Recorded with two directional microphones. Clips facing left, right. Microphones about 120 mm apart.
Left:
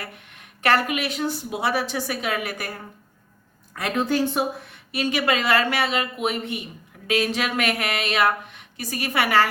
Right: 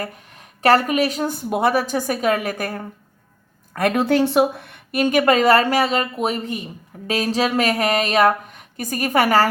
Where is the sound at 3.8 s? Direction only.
60° right (ahead or behind).